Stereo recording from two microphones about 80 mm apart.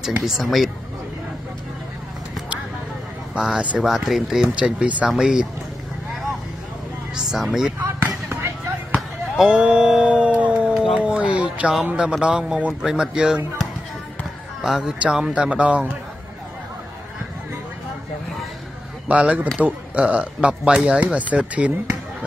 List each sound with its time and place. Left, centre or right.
0.0 s speech: centre
3.3 s speech: centre
7.2 s speech: centre
8.3 s basketball bounce: right
8.9 s a sound: centre
10.7 s a sound: centre
11.0 s a sound: centre
11.7 s speech: centre
14.6 s speech: centre
19.0 s speech: centre